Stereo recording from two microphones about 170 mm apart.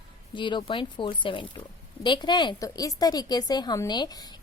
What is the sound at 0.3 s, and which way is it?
A woman's voice, 30° left (ahead or behind).